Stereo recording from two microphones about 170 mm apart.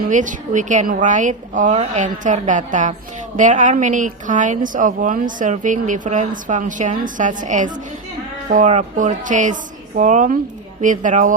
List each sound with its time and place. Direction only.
0.1 s a woman's voice: 50° right (ahead or behind)